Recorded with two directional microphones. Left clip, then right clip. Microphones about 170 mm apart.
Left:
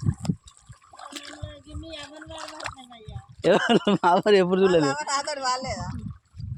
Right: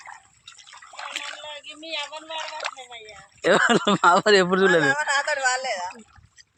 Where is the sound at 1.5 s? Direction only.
75° left (ahead or behind).